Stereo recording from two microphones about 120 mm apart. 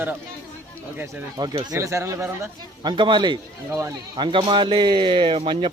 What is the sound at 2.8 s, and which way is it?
A man's voice, 40° right (ahead or behind).